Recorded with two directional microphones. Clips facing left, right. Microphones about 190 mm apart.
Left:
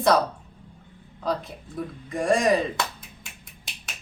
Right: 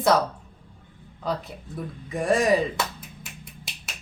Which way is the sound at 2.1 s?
Centre (ahead or behind).